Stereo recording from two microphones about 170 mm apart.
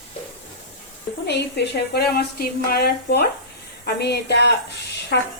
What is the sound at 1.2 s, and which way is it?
A woman's voice, 80° left.